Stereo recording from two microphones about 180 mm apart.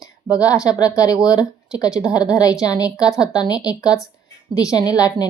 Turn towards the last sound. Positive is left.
turn(degrees=20)  # may be behind; listen again after turning